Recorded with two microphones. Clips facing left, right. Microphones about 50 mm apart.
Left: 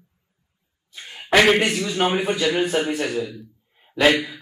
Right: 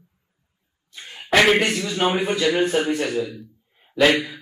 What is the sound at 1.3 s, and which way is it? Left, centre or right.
A man's voice, centre.